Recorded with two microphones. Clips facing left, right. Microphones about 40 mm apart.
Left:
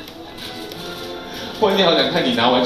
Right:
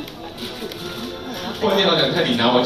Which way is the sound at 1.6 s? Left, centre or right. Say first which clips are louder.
Left 2 dB; left.